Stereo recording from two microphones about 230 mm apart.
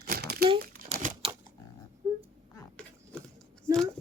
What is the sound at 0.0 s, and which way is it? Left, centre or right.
Crumpling, right.